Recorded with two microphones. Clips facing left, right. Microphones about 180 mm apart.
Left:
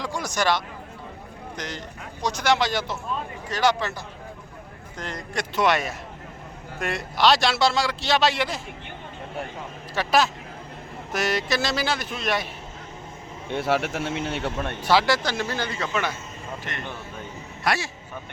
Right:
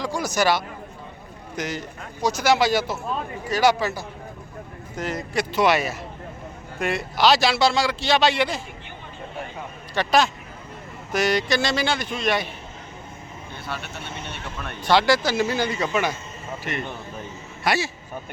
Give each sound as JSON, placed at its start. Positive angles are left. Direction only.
{"t": 0.0, "sound": "a sound", "side_deg": 0}
{"t": 1.5, "sound": "speech", "side_deg": -5}
{"t": 9.9, "sound": "speech", "side_deg": 5}
{"t": 13.5, "sound": "speech", "side_deg": 90}
{"t": 14.8, "sound": "speech", "side_deg": 5}